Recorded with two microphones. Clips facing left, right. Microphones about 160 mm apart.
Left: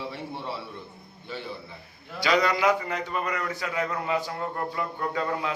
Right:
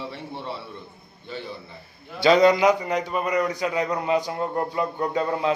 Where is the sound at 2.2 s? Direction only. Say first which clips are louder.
Right 7 dB; 25° right (ahead or behind).